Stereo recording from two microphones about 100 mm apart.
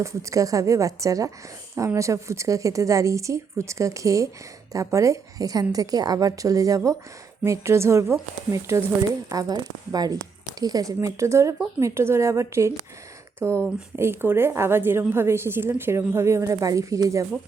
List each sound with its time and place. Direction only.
0.0 s a woman's voice: 30° right (ahead or behind)